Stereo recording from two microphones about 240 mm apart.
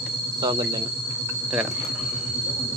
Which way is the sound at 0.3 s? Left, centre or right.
Centre.